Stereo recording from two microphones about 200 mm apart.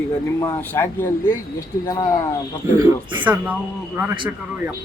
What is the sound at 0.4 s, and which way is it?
Speech, 10° left (ahead or behind).